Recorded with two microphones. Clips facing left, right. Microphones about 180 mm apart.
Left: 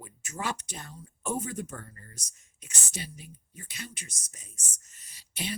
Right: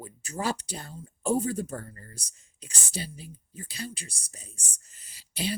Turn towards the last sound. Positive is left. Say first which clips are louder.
# right 5 dB
turn(degrees=-30)  # may be behind; listen again after turning